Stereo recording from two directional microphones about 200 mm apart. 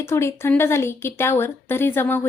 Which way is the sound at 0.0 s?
15° left (ahead or behind).